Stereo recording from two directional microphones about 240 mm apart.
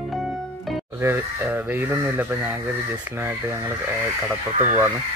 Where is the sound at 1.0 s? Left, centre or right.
Centre.